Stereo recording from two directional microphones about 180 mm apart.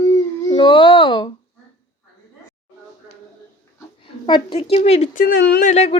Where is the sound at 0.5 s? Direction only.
25° left (ahead or behind).